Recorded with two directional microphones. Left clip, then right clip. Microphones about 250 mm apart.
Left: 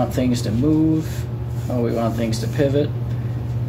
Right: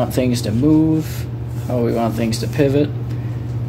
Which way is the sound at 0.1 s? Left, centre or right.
Right.